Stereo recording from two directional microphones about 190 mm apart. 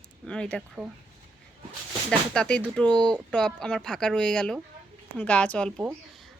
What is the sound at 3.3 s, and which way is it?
A woman's voice, 5° left (ahead or behind).